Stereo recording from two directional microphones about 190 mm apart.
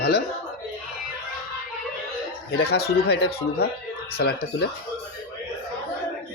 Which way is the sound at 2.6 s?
55° left (ahead or behind).